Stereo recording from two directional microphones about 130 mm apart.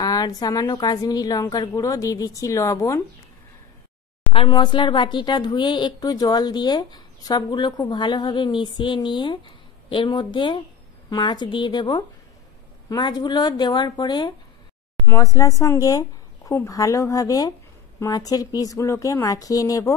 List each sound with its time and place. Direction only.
0.0 s a woman's voice: 30° left (ahead or behind)
4.5 s a woman's voice: 35° left (ahead or behind)
15.0 s a woman's voice: 25° left (ahead or behind)